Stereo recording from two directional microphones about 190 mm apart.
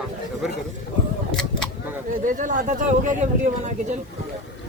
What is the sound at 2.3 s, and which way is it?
Speech, 40° right (ahead or behind).